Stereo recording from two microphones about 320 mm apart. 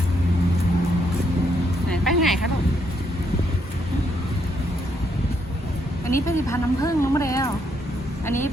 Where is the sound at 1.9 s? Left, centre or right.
Centre.